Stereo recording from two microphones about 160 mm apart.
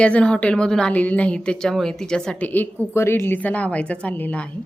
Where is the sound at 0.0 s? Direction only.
5° left (ahead or behind).